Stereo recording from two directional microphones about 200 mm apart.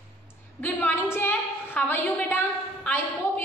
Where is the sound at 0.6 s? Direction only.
10° left (ahead or behind).